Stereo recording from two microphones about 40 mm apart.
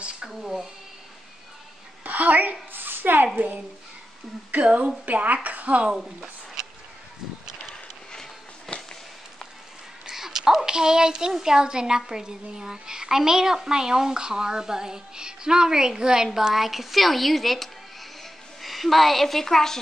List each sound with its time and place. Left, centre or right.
0.4 s a child's voice: centre
2.0 s a sound: right
2.7 s a sound: right
3.3 s a child's voice: right
4.6 s a woman's voice: right
5.0 s a woman's voice: right
5.9 s a child's voice: centre
8.1 s walk: centre
10.0 s a child's voice: centre
16.3 s a woman's voice: centre